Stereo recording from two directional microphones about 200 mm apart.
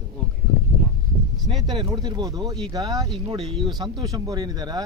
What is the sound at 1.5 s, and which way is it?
Speech, 25° right (ahead or behind).